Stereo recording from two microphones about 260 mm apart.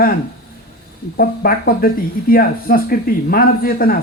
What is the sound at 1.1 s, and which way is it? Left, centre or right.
Speech, left.